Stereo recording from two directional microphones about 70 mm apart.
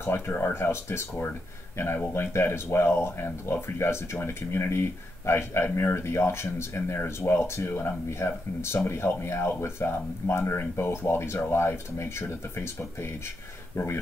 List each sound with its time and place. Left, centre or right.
0.0 s speech: left